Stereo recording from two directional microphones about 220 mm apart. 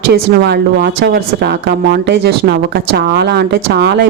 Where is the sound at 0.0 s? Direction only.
50° right (ahead or behind).